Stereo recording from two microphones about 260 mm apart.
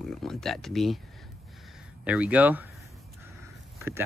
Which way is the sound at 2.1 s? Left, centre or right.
Centre.